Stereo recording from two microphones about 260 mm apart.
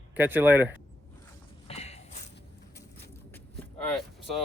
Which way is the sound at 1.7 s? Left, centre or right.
Left.